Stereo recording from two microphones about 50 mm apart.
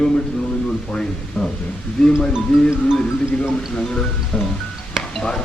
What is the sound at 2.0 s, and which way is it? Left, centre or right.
Speech, centre.